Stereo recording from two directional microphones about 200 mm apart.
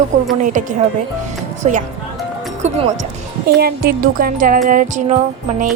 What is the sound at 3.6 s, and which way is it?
Speech, 50° right (ahead or behind).